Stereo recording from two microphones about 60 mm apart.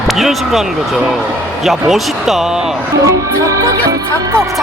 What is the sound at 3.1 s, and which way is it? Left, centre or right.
Music, right.